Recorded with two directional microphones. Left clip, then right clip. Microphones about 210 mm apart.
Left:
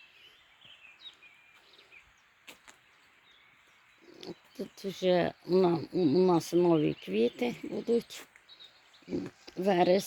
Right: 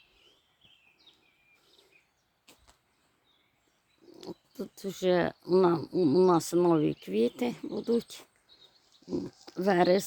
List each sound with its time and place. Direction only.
4.1 s speech: 20° right (ahead or behind)
9.6 s speech: 15° right (ahead or behind)